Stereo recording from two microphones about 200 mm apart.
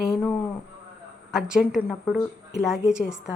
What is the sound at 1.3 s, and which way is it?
A woman's voice, centre (ahead or behind).